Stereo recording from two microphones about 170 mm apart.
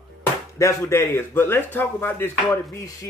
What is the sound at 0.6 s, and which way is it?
Speech, 15° left (ahead or behind).